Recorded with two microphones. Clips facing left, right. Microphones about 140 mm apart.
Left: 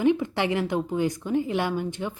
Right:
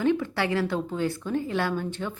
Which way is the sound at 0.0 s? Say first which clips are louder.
Left 2 dB; 15° left (ahead or behind).